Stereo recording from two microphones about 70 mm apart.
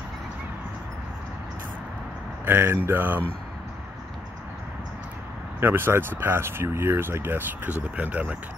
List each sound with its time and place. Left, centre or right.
2.4 s speech: right
5.6 s speech: right